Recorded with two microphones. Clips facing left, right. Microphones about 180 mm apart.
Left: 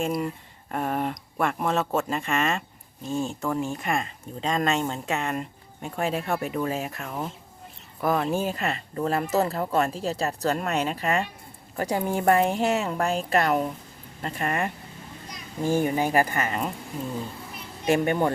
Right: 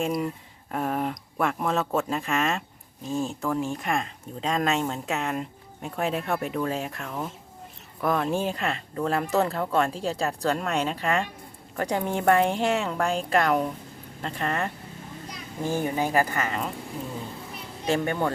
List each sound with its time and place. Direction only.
0.0 s speech: centre (ahead or behind); by 16.7 s 15° left (ahead or behind)
17.8 s speech: 15° left (ahead or behind)